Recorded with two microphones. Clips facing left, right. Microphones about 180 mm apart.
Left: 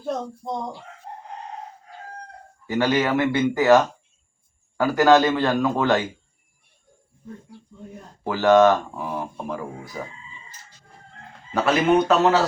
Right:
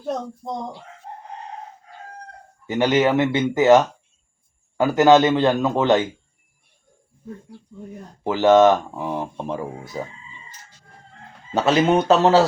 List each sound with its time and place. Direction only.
2.6 s speech: 20° right (ahead or behind)
4.8 s speech: 20° right (ahead or behind)
8.2 s speech: 20° right (ahead or behind)
11.5 s speech: 25° right (ahead or behind)